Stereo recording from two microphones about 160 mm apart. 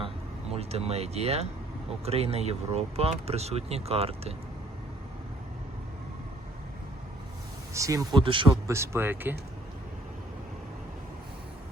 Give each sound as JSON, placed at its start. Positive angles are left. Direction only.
{"t": 0.5, "sound": "speech", "side_deg": -40}
{"t": 7.7, "sound": "speech", "side_deg": -20}
{"t": 8.2, "sound": "speech", "side_deg": -30}
{"t": 8.6, "sound": "speech", "side_deg": -15}